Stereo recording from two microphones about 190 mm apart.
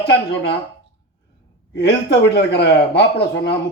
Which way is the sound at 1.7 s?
60° left (ahead or behind).